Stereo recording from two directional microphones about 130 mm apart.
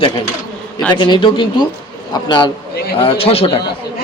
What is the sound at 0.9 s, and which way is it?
A man's voice, 35° left (ahead or behind).